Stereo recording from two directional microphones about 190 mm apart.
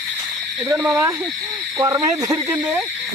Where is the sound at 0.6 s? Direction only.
10° right (ahead or behind).